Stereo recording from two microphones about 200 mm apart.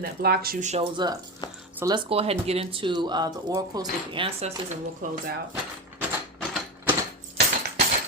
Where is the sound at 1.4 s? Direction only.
20° left (ahead or behind).